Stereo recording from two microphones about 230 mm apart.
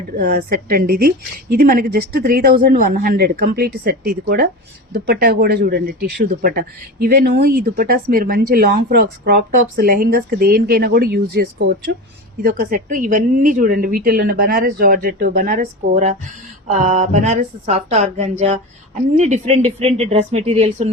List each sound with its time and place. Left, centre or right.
0.2 s speech: right